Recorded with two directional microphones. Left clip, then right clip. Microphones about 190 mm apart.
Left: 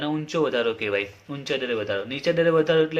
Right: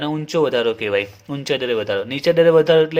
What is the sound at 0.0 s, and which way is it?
Speech, 40° right (ahead or behind).